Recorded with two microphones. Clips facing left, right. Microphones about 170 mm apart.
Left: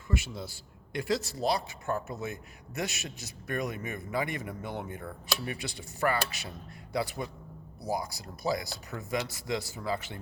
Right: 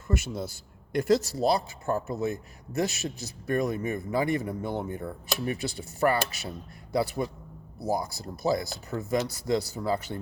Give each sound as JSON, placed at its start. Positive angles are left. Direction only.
{"t": 0.1, "sound": "a man's voice", "side_deg": -45}
{"t": 8.9, "sound": "a man's voice", "side_deg": -40}